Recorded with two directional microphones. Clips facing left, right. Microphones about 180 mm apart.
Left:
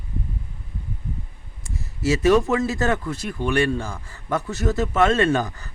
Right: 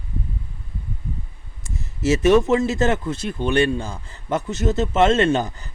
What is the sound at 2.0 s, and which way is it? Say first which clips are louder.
Speech: right 2 dB; 20° right (ahead or behind).